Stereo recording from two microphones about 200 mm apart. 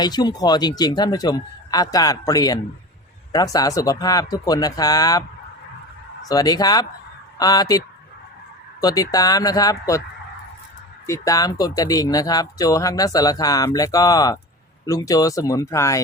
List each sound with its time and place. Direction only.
0.0 s a man's voice: 20° left (ahead or behind)
6.2 s a man's voice: 20° left (ahead or behind)
8.8 s speech: 20° left (ahead or behind)
11.0 s speech: 15° left (ahead or behind)